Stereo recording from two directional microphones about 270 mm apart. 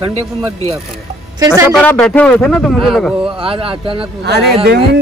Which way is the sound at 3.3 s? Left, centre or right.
Centre.